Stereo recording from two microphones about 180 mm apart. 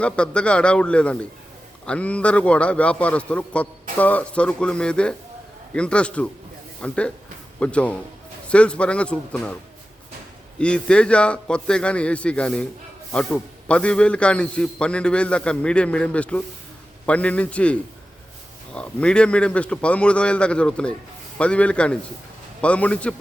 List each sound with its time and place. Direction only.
0.0 s a man's voice: 5° left (ahead or behind)
10.6 s a man's voice: 5° left (ahead or behind)